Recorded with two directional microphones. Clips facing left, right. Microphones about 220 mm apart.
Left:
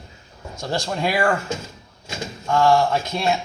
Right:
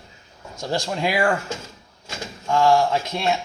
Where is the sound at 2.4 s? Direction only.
15° right (ahead or behind).